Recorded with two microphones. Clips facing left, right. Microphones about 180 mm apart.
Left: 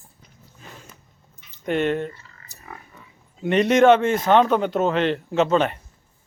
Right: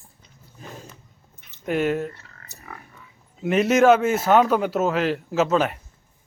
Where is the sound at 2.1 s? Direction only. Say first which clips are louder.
Right 1 dB; 65° right (ahead or behind).